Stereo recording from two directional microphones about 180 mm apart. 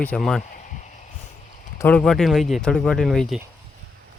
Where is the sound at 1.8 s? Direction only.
10° left (ahead or behind).